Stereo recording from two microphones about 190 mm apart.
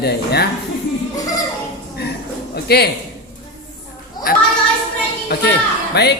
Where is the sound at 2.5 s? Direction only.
55° left (ahead or behind).